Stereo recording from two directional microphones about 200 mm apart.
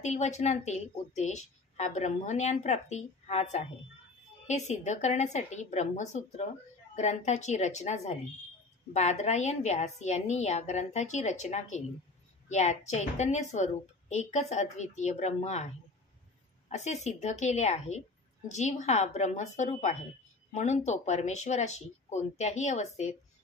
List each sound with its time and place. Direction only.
0.0 s speech: 35° left (ahead or behind)